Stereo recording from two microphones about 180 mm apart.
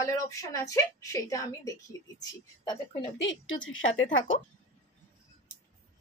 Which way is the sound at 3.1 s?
90° left.